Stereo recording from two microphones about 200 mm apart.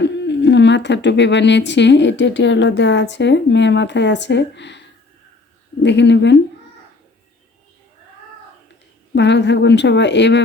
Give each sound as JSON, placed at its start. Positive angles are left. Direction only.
{"t": 0.0, "sound": "speech", "side_deg": 60}
{"t": 9.1, "sound": "speech", "side_deg": 60}